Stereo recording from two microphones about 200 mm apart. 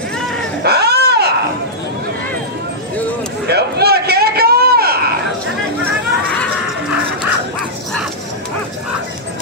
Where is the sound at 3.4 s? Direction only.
55° right (ahead or behind).